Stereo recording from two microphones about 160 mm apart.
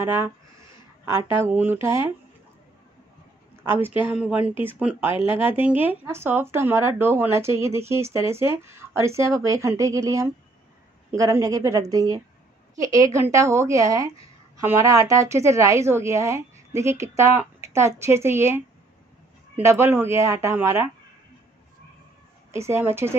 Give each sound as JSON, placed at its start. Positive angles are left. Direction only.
{"t": 0.0, "sound": "speech", "side_deg": -15}
{"t": 1.3, "sound": "speech", "side_deg": -15}
{"t": 3.6, "sound": "a woman's voice", "side_deg": -15}
{"t": 19.6, "sound": "speech", "side_deg": -15}
{"t": 22.5, "sound": "speech", "side_deg": -15}